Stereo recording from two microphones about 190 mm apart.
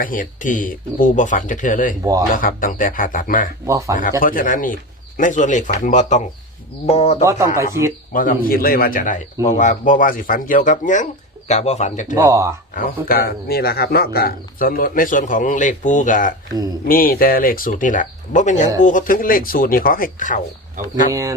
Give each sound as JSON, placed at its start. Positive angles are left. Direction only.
{"t": 0.0, "sound": "a man's voice", "side_deg": 45}
{"t": 3.7, "sound": "speech", "side_deg": -15}
{"t": 4.2, "sound": "a man's voice", "side_deg": 45}
{"t": 7.3, "sound": "speech", "side_deg": -15}
{"t": 8.1, "sound": "a man's voice", "side_deg": 45}
{"t": 12.1, "sound": "speech", "side_deg": -15}
{"t": 12.7, "sound": "a man's voice", "side_deg": 50}
{"t": 21.1, "sound": "speech", "side_deg": -15}